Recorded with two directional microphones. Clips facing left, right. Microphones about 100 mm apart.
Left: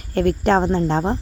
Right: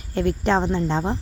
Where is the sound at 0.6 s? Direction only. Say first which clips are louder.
Left 4 dB; 45° left (ahead or behind).